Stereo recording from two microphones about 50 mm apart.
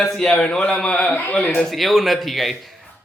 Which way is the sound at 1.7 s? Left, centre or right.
Centre.